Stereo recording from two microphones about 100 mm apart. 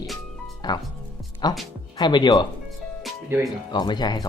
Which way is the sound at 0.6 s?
40° left (ahead or behind).